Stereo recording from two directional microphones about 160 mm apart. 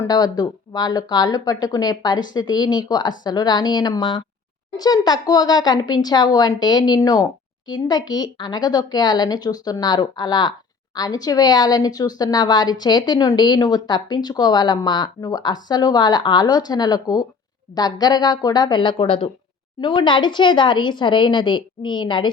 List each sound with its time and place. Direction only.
0.0 s a woman's voice: 25° left (ahead or behind)